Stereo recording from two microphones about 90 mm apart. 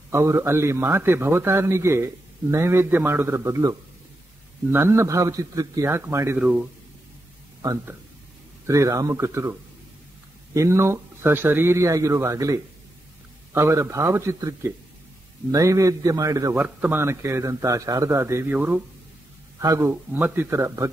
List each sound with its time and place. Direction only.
0.1 s a man's voice: 30° right (ahead or behind)
8.6 s speech: 35° right (ahead or behind)
16.5 s a man's voice: 15° right (ahead or behind)
17.0 s speech: 30° right (ahead or behind)
18.5 s a man's voice: 20° right (ahead or behind)
19.6 s a man's voice: 35° right (ahead or behind)